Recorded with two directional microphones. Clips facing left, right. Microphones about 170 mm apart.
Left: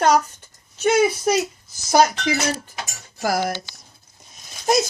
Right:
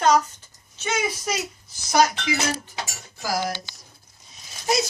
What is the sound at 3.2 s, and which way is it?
Speech, 60° left (ahead or behind).